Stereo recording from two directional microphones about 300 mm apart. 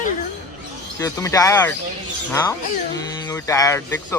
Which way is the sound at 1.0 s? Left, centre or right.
Centre.